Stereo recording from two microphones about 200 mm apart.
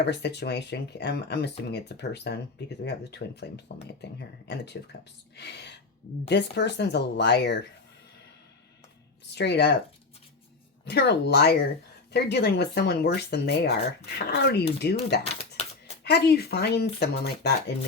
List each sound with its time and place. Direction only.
0.0 s speech: 60° left (ahead or behind)
9.3 s speech: 60° left (ahead or behind)
10.8 s speech: 55° left (ahead or behind)
15.2 s typewriter: 30° left (ahead or behind)
16.0 s speech: 55° left (ahead or behind)